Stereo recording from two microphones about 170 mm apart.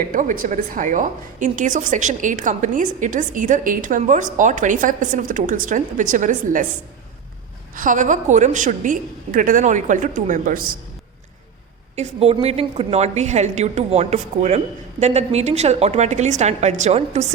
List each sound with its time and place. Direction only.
0.1 s a woman's voice: 50° right (ahead or behind)
7.8 s a woman's voice: 50° right (ahead or behind)
11.9 s a woman's voice: 35° right (ahead or behind)